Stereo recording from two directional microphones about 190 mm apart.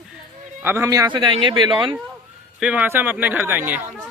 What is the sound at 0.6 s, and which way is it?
A man's voice, 10° right (ahead or behind).